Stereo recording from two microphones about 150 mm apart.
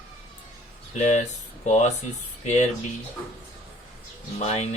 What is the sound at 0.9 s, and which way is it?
Speech, 50° left (ahead or behind).